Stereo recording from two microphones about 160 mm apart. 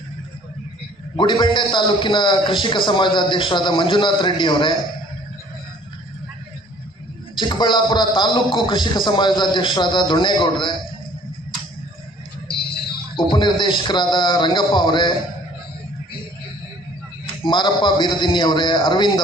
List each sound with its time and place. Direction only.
1.1 s a man's voice: 30° left (ahead or behind)
7.3 s a man's voice: 30° left (ahead or behind)
13.1 s a man's voice: 30° left (ahead or behind)
17.4 s a man's voice: 30° left (ahead or behind)